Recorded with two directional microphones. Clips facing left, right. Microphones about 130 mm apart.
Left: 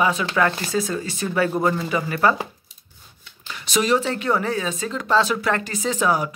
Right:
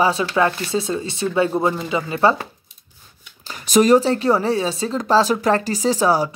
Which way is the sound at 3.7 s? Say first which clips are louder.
Right 7 dB; 45° right (ahead or behind).